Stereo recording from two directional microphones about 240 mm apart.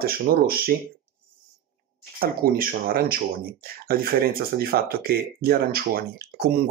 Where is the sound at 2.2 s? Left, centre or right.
Right.